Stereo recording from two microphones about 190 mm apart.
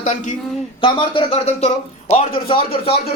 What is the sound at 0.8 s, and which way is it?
Speech, 25° left (ahead or behind).